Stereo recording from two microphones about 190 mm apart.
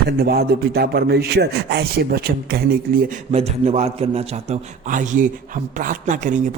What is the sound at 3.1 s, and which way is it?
Speech, 35° right (ahead or behind).